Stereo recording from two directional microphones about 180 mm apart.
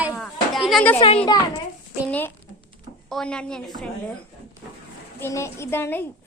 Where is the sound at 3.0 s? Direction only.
5° left (ahead or behind).